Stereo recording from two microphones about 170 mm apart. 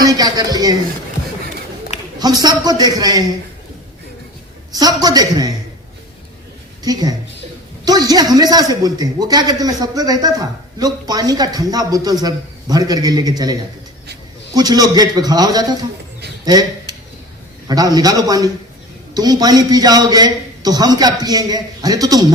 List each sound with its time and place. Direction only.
0.0 s a man's voice: 20° right (ahead or behind)
2.1 s a man's voice: 25° right (ahead or behind)
4.7 s a man's voice: 20° right (ahead or behind)
6.8 s a man's voice: 20° right (ahead or behind)